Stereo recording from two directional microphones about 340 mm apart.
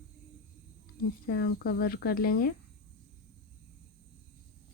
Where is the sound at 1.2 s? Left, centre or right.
Left.